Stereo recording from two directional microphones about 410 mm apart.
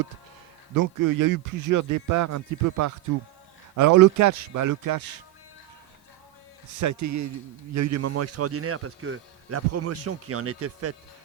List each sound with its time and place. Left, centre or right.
0.8 s speech: right
6.7 s speech: right